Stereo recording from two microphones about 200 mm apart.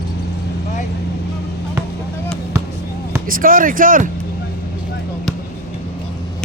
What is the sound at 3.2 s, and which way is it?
Speech, 45° right (ahead or behind).